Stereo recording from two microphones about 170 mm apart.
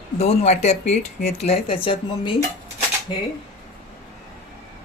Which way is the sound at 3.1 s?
30° left (ahead or behind).